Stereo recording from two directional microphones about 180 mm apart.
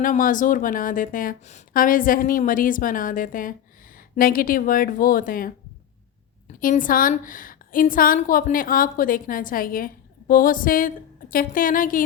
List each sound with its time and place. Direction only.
0.0 s a woman's voice: 50° left (ahead or behind)
6.6 s a woman's voice: 50° left (ahead or behind)